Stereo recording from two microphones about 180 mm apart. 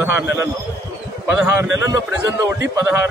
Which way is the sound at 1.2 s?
15° right (ahead or behind).